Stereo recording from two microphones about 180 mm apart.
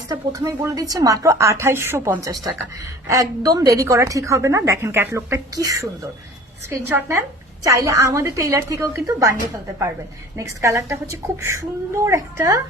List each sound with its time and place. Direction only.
0.1 s a woman's voice: 20° right (ahead or behind)
6.8 s a woman's voice: 10° right (ahead or behind)
10.3 s a woman's voice: 15° right (ahead or behind)